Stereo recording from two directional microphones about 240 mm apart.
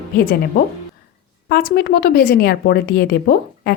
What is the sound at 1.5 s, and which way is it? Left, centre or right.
A woman's voice, left.